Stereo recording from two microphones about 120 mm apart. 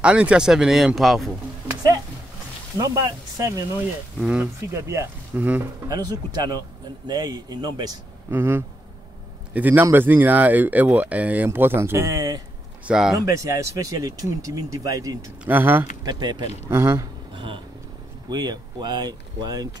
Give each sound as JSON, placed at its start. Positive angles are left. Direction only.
{"t": 0.0, "sound": "speech", "side_deg": -10}
{"t": 2.8, "sound": "speech", "side_deg": -30}
{"t": 4.2, "sound": "speech", "side_deg": -10}
{"t": 4.7, "sound": "speech", "side_deg": -25}
{"t": 5.9, "sound": "speech", "side_deg": -35}
{"t": 8.3, "sound": "speech", "side_deg": -20}
{"t": 12.8, "sound": "speech", "side_deg": -5}
{"t": 13.2, "sound": "speech", "side_deg": -25}
{"t": 15.4, "sound": "speech", "side_deg": -15}
{"t": 16.0, "sound": "speech", "side_deg": -35}
{"t": 16.7, "sound": "speech", "side_deg": -20}
{"t": 18.3, "sound": "speech", "side_deg": -35}